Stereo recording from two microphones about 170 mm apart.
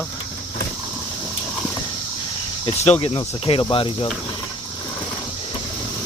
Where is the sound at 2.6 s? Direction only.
30° left (ahead or behind).